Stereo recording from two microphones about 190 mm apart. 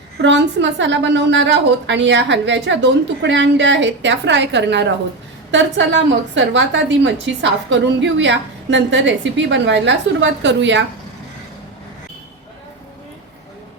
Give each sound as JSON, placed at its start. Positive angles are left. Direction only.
{"t": 0.2, "sound": "a woman's voice", "side_deg": -65}